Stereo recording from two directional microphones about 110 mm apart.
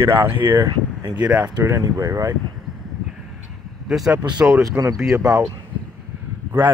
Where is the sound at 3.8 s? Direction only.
5° right (ahead or behind).